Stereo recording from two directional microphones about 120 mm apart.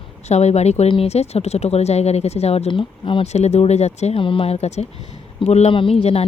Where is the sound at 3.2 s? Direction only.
65° left (ahead or behind).